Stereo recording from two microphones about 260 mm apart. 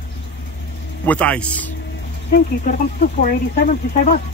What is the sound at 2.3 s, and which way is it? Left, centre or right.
Speech, left.